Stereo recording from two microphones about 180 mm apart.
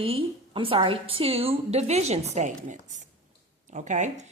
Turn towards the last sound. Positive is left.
turn(degrees=-40)  # may be behind; listen again after turning